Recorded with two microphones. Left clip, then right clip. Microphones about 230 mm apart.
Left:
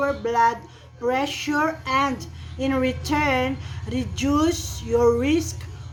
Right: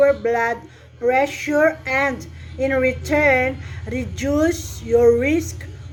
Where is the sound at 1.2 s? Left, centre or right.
Centre.